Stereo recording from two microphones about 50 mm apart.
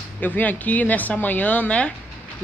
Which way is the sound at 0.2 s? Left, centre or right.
Left.